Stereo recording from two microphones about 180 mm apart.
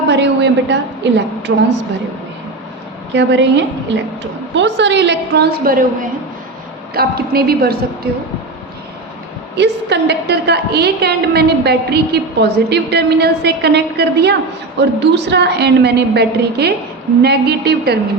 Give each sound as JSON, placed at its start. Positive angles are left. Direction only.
{"t": 0.1, "sound": "a woman's voice", "side_deg": -75}
{"t": 3.2, "sound": "a woman's voice", "side_deg": -85}
{"t": 9.6, "sound": "a woman's voice", "side_deg": -70}